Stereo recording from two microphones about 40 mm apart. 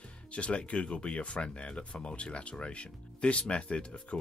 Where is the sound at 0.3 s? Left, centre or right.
Left.